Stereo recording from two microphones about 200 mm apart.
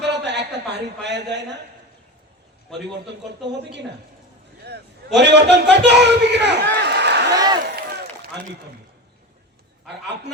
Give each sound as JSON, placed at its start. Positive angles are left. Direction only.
{"t": 0.0, "sound": "a sound", "side_deg": -60}
{"t": 3.4, "sound": "a man's voice", "side_deg": -60}
{"t": 7.3, "sound": "speech", "side_deg": -20}
{"t": 7.8, "sound": "run", "side_deg": -50}